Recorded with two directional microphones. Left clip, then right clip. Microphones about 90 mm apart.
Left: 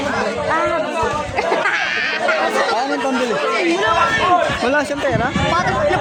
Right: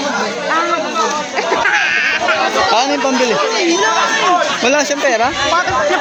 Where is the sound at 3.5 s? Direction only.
5° right (ahead or behind).